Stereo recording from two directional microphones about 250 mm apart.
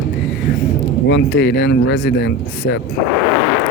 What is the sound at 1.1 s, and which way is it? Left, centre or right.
Speech, left.